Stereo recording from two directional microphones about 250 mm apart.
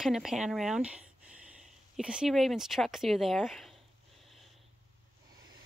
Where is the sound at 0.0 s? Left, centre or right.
Centre.